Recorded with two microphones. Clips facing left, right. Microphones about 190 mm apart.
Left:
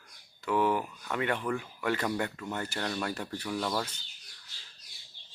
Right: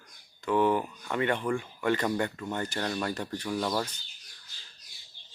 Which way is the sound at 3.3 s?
10° right (ahead or behind).